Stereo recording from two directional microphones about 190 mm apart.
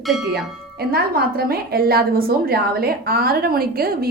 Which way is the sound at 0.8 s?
55° right (ahead or behind).